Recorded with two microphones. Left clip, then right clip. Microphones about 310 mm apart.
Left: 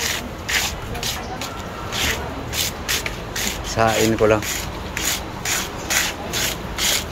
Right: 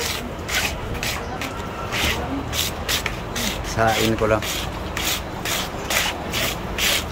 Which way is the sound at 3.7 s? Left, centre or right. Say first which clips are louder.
Left 2 dB; centre.